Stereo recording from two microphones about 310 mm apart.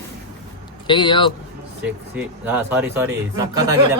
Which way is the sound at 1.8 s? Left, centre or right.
Centre.